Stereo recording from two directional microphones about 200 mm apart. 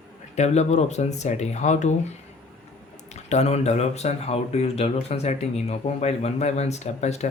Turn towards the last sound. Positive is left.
turn(degrees=35)  # may be behind; listen again after turning